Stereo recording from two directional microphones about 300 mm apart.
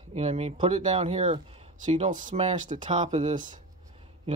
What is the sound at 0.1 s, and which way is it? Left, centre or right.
Speech, right.